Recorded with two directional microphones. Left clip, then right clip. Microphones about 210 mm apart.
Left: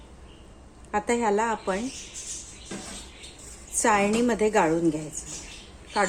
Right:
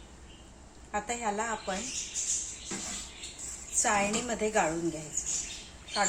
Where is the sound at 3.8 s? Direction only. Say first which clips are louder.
Left 7 dB; 55° left (ahead or behind).